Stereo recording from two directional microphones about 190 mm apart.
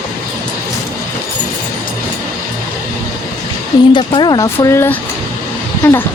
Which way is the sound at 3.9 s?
25° left (ahead or behind).